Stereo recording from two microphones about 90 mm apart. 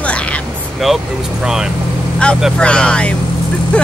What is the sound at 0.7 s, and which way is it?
Speech, centre (ahead or behind).